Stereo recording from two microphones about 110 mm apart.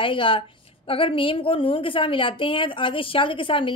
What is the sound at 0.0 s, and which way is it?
A woman's voice, 50° left (ahead or behind).